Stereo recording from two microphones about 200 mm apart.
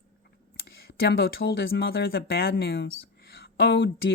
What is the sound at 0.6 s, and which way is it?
Speech, 50° left (ahead or behind).